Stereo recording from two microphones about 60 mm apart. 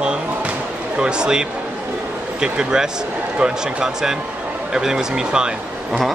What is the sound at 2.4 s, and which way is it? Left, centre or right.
Speech, centre.